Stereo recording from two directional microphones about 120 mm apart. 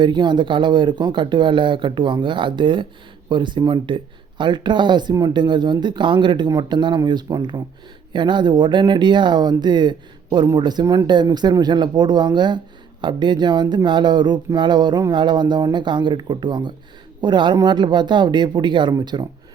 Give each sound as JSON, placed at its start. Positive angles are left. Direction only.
{"t": 0.0, "sound": "speech", "side_deg": -40}